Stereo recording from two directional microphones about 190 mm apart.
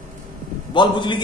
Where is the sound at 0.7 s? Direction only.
25° left (ahead or behind).